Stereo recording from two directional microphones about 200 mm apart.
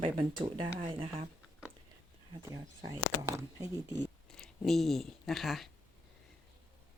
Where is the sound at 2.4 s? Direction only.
15° right (ahead or behind).